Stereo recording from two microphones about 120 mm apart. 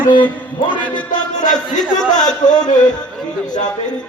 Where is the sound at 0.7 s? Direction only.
40° left (ahead or behind).